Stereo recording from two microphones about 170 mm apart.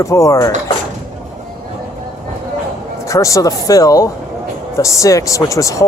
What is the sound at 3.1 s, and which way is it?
Speech, 20° left (ahead or behind).